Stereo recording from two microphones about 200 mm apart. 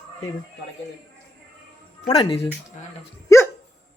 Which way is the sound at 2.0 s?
30° left (ahead or behind).